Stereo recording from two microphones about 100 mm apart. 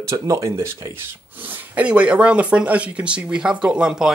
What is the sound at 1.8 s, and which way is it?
Speech, 10° right (ahead or behind).